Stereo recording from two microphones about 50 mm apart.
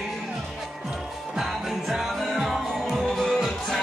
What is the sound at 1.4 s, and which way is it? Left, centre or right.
Music, centre.